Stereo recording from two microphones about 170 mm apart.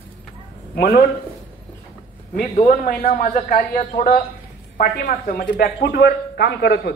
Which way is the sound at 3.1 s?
50° left (ahead or behind).